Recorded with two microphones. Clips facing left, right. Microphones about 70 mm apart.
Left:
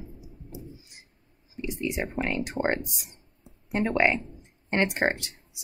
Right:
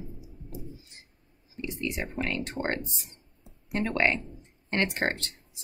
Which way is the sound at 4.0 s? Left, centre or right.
Centre.